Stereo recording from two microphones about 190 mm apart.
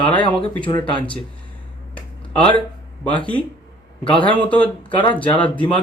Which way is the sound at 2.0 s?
5° left (ahead or behind).